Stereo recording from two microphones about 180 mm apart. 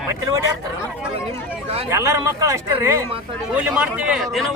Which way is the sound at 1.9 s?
15° right (ahead or behind).